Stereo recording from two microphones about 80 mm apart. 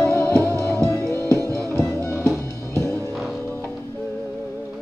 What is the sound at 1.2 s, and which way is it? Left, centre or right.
Music, right.